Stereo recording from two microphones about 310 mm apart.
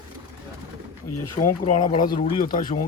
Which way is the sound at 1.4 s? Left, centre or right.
Centre.